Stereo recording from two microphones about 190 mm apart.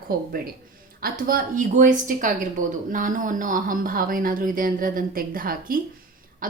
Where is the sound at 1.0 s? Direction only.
50° right (ahead or behind).